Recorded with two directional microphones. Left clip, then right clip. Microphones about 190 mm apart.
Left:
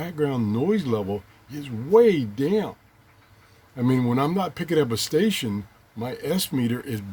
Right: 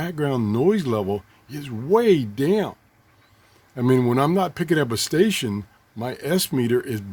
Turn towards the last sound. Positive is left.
turn(degrees=-50)  # may be behind; listen again after turning